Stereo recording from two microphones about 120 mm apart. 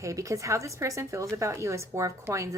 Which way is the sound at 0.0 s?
25° right (ahead or behind).